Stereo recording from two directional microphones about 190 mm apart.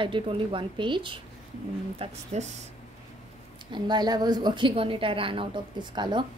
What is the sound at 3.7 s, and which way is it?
A woman's voice, 20° right (ahead or behind).